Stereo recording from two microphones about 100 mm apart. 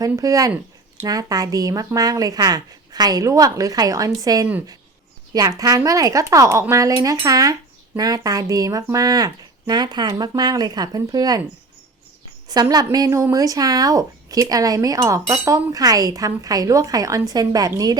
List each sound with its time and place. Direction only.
0.0 s speech: 35° right (ahead or behind)
12.7 s speech: 40° right (ahead or behind)